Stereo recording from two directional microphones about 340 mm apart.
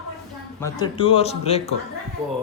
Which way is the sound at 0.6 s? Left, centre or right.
Centre.